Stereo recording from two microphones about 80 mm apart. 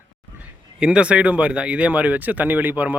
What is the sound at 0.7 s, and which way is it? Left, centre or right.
Speech, centre.